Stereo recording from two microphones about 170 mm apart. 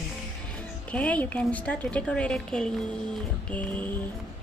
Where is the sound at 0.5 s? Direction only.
10° left (ahead or behind).